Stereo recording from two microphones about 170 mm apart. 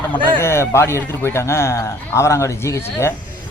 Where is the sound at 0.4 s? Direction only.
15° left (ahead or behind).